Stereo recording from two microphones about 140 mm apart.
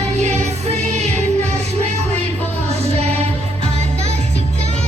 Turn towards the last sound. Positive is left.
turn(degrees=-50)  # may be behind; listen again after turning